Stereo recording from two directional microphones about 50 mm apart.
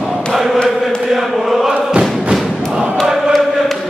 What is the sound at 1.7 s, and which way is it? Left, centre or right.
Thump, centre.